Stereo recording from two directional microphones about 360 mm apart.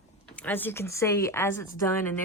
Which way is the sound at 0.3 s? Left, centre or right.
Centre.